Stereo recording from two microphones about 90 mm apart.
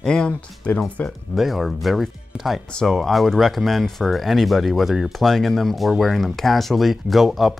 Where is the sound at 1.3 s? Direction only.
Centre (ahead or behind).